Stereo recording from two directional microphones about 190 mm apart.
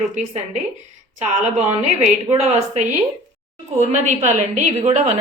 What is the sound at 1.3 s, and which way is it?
Speech, 40° right (ahead or behind).